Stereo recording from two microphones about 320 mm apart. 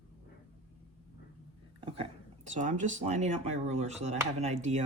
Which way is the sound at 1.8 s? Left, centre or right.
Centre.